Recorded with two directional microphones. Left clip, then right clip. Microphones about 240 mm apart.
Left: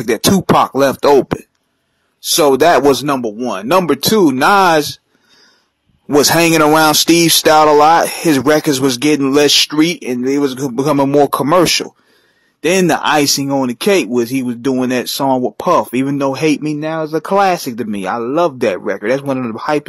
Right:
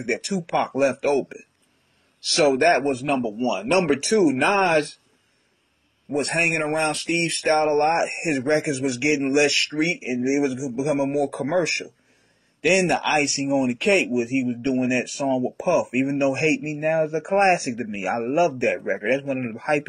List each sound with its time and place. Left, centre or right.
0.7 s speech: left
2.2 s speech: left
6.1 s speech: left
15.2 s speech: left
15.5 s speech: left